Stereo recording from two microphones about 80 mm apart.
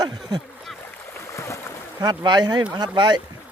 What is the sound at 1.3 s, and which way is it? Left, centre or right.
Boat, left.